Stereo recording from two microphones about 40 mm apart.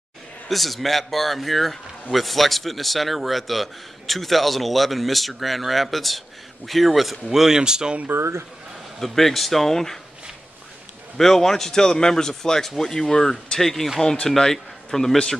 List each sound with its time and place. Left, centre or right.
0.5 s a man's voice: centre
8.1 s speech: right
9.0 s a man's voice: centre
11.1 s a man's voice: centre